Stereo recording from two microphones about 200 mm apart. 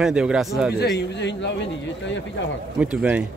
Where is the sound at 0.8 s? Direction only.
55° left (ahead or behind).